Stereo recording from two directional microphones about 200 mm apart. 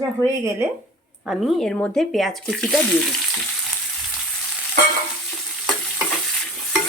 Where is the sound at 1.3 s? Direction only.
Centre (ahead or behind).